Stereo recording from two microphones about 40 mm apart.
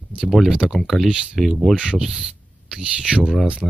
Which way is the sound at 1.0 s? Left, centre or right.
Centre.